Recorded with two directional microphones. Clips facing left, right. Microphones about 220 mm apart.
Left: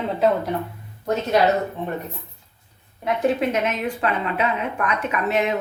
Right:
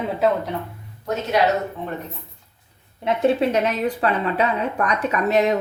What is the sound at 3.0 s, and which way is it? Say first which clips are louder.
A woman's voice: right 2 dB; 25° right (ahead or behind).